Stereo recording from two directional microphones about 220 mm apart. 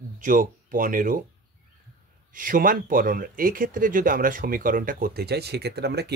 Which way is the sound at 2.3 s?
40° right (ahead or behind).